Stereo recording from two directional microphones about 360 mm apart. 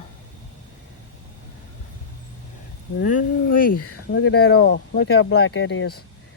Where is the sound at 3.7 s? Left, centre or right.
Left.